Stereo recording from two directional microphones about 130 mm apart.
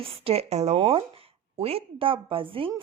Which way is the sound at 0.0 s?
50° right (ahead or behind).